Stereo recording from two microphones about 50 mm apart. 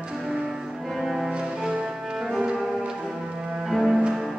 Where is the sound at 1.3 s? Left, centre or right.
Centre.